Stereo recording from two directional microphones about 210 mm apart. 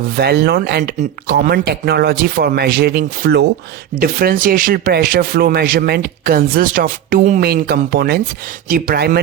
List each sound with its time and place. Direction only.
0.2 s speech: 50° right (ahead or behind)